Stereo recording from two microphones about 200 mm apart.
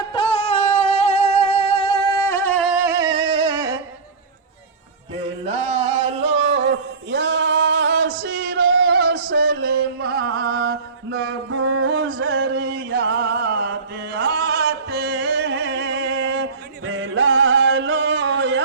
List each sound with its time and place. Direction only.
0.1 s music: 25° left (ahead or behind); by 2.9 s centre (ahead or behind)
3.1 s music: 55° right (ahead or behind)
6.5 s a sound: 60° right (ahead or behind)
11.5 s music: 90° right; by 12.9 s 70° right (ahead or behind)
12.9 s chant: 55° right (ahead or behind)